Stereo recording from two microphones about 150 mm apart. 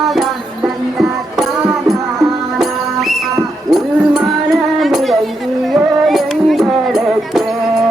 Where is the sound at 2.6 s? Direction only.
Centre (ahead or behind).